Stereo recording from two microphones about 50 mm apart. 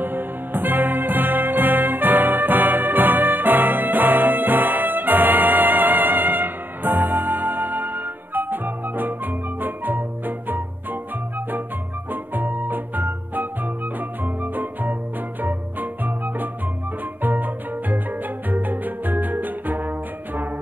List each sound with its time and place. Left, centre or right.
0.0 s music: right
12.1 s organ: right
14.2 s music: right
17.2 s music: right